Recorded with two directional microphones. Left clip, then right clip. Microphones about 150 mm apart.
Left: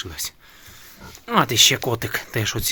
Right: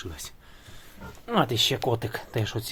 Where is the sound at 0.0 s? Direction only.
10° left (ahead or behind).